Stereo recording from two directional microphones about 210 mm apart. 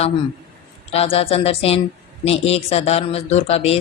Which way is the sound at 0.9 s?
25° left (ahead or behind).